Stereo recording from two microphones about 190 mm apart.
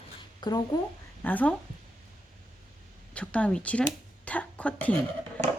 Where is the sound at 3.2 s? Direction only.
5° left (ahead or behind).